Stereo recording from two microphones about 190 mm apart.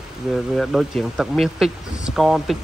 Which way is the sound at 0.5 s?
Centre (ahead or behind).